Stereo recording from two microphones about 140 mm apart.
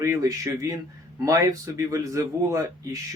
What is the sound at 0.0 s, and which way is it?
Speech, 25° right (ahead or behind).